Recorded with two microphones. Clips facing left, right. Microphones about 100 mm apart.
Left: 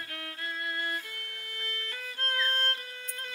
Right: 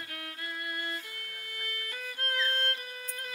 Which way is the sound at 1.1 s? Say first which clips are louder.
Left 1 dB; 30° left (ahead or behind).